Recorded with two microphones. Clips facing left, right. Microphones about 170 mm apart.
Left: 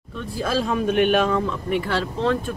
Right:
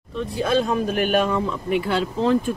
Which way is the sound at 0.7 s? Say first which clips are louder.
Left 3 dB; 40° right (ahead or behind).